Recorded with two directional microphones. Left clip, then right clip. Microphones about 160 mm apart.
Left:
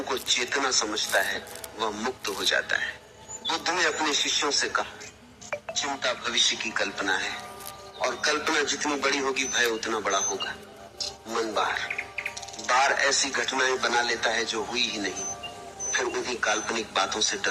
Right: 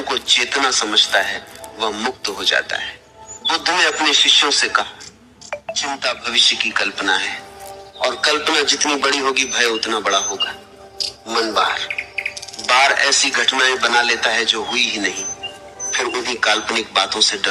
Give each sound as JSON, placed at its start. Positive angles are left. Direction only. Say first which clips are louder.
{"t": 0.0, "sound": "chirp", "louder": "right 10 dB", "side_deg": -25}